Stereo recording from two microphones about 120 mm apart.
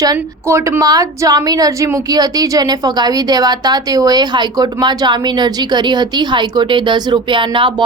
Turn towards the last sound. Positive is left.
turn(degrees=-45)  # may be behind; listen again after turning